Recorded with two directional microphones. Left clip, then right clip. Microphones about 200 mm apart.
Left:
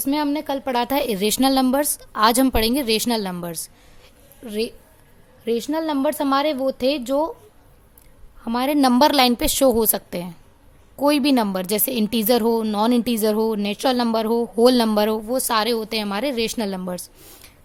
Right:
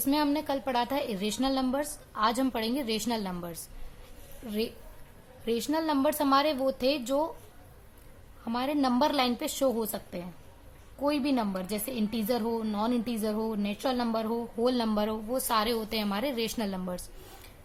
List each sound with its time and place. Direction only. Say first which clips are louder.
0.0 s a woman's voice: left 5 dB; 35° left (ahead or behind)
8.4 s speech: left 10 dB; 45° left (ahead or behind)